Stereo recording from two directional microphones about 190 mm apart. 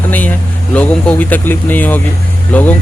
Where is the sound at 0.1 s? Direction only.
10° left (ahead or behind).